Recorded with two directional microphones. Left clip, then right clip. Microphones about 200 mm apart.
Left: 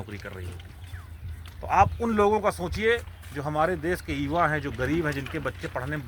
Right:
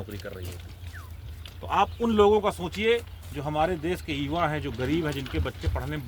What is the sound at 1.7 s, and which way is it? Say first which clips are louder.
Speech: left 3 dB; 20° left (ahead or behind).